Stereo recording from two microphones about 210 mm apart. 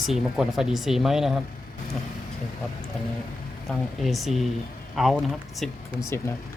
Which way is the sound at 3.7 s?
Centre (ahead or behind).